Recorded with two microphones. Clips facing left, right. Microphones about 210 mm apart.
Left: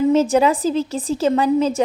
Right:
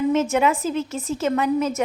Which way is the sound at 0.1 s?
35° left (ahead or behind).